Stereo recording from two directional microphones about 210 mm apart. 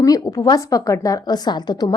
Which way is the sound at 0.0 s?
15° left (ahead or behind).